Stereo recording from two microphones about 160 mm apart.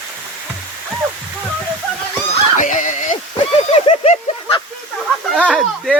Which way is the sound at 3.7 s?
35° left (ahead or behind).